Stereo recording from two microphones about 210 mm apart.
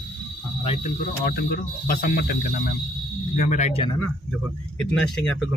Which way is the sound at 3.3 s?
35° left (ahead or behind).